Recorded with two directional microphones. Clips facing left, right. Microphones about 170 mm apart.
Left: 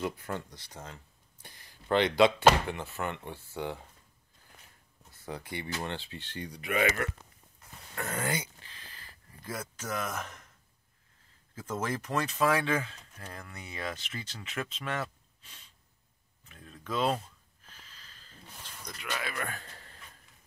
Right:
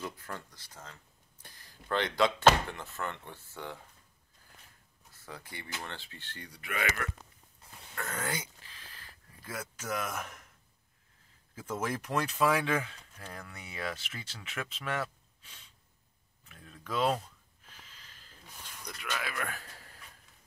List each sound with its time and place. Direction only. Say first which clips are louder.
0.0 s speech: left 6 dB; 20° left (ahead or behind)
1.4 s speech: left 1 dB; 15° left (ahead or behind)
5.3 s speech: left 7 dB; 20° left (ahead or behind)
8.3 s speech: left 4 dB; centre (ahead or behind)
11.5 s speech: left 1 dB; 10° right (ahead or behind)
16.6 s speech: even; 5° right (ahead or behind)
17.6 s a sound: even; 15° right (ahead or behind)
18.8 s a man's voice: left 1 dB; 5° left (ahead or behind)